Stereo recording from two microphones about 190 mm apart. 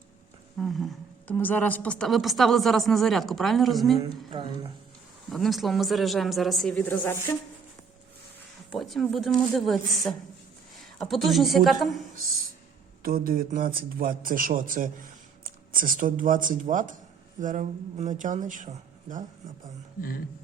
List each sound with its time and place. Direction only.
0.6 s a woman's voice: centre (ahead or behind)
4.3 s speech: 25° right (ahead or behind)
5.3 s a woman's voice: centre (ahead or behind)
8.7 s a woman's voice: centre (ahead or behind)
13.0 s a man's voice: 50° right (ahead or behind)
20.0 s a sound: 50° left (ahead or behind)